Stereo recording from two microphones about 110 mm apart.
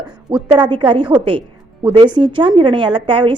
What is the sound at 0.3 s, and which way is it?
A woman's voice, 55° right (ahead or behind).